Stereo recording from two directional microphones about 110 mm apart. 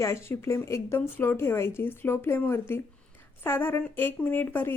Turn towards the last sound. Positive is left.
turn(degrees=20)  # may be behind; listen again after turning